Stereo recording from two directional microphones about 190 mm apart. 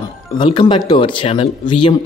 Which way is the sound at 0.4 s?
25° left (ahead or behind).